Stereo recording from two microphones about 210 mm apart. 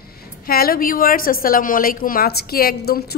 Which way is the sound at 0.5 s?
45° left (ahead or behind).